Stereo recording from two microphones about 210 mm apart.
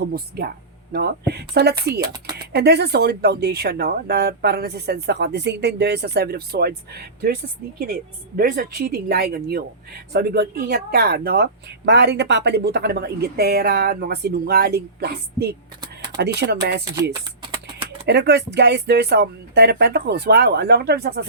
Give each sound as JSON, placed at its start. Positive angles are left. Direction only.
{"t": 0.0, "sound": "speech", "side_deg": -50}
{"t": 8.4, "sound": "speech", "side_deg": -45}
{"t": 17.4, "sound": "a sound", "side_deg": -25}
{"t": 18.0, "sound": "speech", "side_deg": -55}